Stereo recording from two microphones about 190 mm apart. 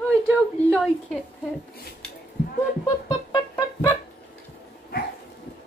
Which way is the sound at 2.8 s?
20° left (ahead or behind).